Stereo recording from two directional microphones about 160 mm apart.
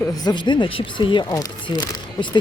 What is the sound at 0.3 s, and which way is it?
Speech, 30° left (ahead or behind).